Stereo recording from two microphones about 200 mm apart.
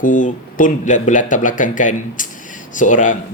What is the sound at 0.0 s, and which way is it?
Speech, 40° left (ahead or behind).